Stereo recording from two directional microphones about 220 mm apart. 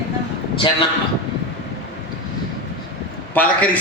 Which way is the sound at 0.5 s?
25° left (ahead or behind).